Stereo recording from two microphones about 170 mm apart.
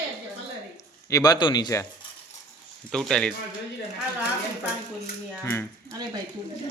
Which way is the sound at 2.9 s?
5° left (ahead or behind).